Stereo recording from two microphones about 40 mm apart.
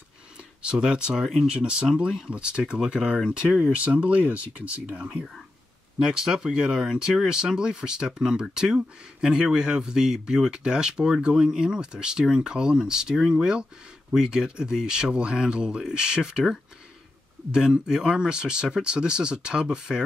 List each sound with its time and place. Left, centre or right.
0.6 s speech: right
1.2 s speech: centre
1.5 s speech: right
1.9 s speech: centre
3.7 s speech: right
6.2 s speech: centre
17.5 s speech: centre